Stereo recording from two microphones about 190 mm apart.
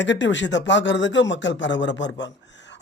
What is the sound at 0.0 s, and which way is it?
Speech, 70° left (ahead or behind).